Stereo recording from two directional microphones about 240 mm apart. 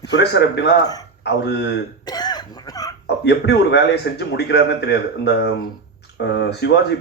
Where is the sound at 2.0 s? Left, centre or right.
Centre.